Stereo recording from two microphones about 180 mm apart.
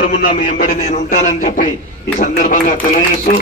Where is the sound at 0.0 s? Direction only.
50° left (ahead or behind).